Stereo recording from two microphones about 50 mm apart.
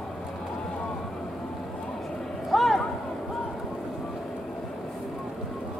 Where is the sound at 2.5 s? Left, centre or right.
Centre.